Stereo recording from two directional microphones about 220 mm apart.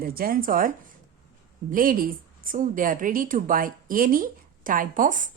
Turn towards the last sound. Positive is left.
turn(degrees=-35)  # may be behind; listen again after turning